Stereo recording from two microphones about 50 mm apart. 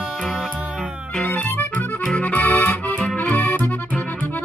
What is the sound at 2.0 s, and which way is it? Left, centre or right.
Accordion, left.